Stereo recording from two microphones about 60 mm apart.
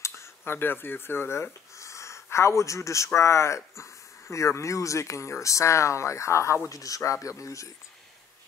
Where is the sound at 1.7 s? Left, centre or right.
Left.